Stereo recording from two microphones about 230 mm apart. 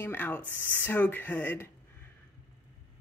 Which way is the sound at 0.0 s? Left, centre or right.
Centre.